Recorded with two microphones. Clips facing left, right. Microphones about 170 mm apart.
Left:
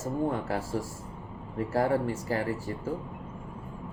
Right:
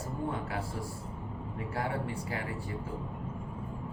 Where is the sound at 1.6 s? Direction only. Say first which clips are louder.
Left 9 dB; 40° left (ahead or behind).